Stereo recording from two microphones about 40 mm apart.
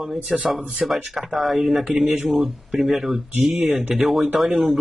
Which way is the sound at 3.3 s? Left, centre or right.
Right.